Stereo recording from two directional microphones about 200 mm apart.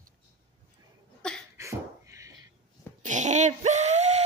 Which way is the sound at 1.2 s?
5° left (ahead or behind).